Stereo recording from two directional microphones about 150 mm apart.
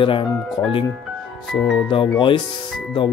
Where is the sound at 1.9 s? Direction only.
35° left (ahead or behind).